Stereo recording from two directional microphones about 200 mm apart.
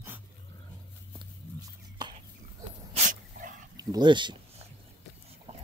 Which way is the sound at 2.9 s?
35° right (ahead or behind).